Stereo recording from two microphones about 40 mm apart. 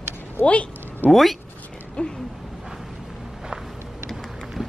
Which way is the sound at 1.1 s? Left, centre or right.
Centre.